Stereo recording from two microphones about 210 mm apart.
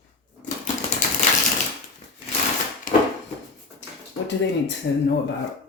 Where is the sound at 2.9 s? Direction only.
40° left (ahead or behind).